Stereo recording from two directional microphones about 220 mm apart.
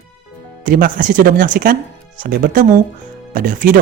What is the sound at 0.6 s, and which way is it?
Speech, 40° right (ahead or behind).